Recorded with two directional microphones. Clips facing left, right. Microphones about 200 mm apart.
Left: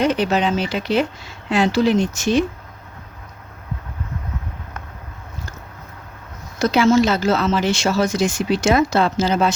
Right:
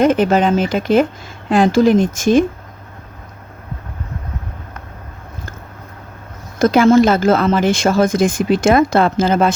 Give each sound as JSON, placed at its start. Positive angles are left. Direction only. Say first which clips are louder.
{"t": 0.0, "sound": "speech", "louder": "right 5 dB", "side_deg": -50}
{"t": 6.6, "sound": "speech", "louder": "right 5 dB", "side_deg": -50}